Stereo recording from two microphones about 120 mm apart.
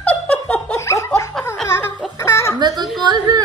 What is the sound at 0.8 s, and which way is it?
Laughter, 25° left (ahead or behind).